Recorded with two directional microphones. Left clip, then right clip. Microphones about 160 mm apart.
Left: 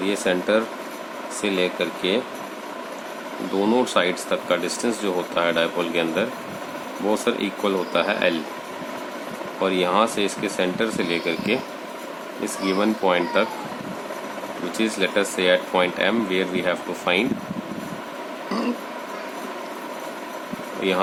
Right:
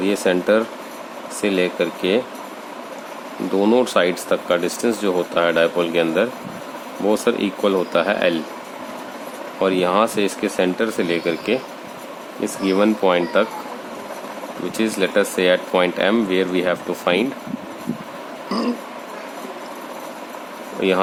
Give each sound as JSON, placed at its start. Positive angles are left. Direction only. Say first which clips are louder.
{"t": 0.0, "sound": "speech", "louder": "right 4 dB", "side_deg": -45}
{"t": 3.6, "sound": "speech", "louder": "right 4 dB", "side_deg": -45}
{"t": 9.6, "sound": "speech", "louder": "right 3 dB", "side_deg": -45}
{"t": 12.6, "sound": "speech", "louder": "right 4 dB", "side_deg": -45}
{"t": 14.8, "sound": "speech", "louder": "right 3 dB", "side_deg": -45}
{"t": 18.4, "sound": "a sound", "louder": "right 3 dB", "side_deg": -30}
{"t": 20.8, "sound": "speech", "louder": "right 5 dB", "side_deg": -50}